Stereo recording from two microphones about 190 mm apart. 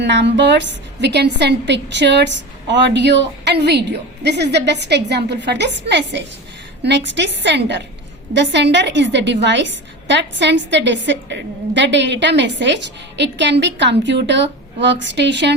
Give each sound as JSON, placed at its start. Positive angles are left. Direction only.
{"t": 0.0, "sound": "a woman's voice", "side_deg": -70}